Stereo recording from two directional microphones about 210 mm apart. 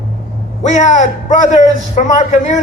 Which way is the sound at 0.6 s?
35° left (ahead or behind).